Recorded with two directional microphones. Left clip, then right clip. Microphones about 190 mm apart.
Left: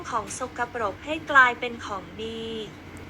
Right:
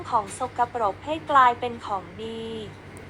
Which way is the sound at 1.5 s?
Centre (ahead or behind).